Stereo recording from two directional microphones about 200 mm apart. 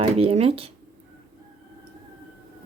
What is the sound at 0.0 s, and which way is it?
Speech, 30° right (ahead or behind).